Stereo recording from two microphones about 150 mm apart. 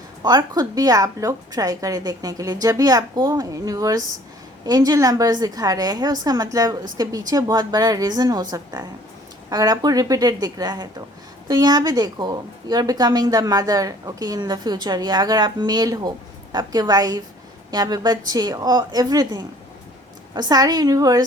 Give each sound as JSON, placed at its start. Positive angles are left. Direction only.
{"t": 0.2, "sound": "a woman's voice", "side_deg": -25}